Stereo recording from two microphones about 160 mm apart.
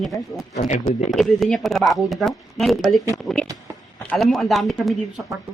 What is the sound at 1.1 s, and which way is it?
Speech, centre (ahead or behind).